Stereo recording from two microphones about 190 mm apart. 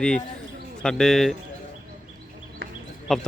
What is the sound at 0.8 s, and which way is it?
Speech, 5° left (ahead or behind).